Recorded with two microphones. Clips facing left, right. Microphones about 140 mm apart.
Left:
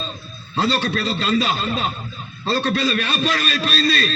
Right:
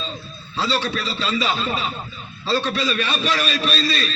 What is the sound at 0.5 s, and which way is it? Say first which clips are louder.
A man's voice: left 3 dB; 50° left (ahead or behind).